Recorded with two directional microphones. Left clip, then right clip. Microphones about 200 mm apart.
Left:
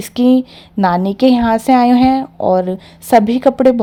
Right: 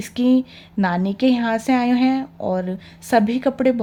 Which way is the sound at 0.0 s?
30° left (ahead or behind).